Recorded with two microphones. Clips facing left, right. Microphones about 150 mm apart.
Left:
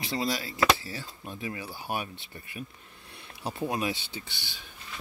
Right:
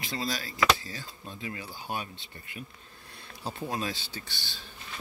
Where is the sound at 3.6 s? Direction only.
20° left (ahead or behind).